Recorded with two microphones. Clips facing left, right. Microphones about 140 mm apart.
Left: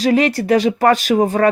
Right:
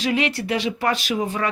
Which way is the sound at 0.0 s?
40° left (ahead or behind).